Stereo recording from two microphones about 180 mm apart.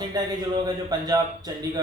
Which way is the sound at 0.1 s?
20° right (ahead or behind).